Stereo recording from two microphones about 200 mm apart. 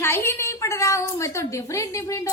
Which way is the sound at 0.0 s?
10° left (ahead or behind).